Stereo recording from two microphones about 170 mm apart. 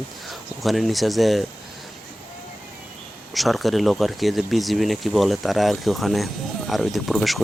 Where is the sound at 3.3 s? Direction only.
Centre (ahead or behind).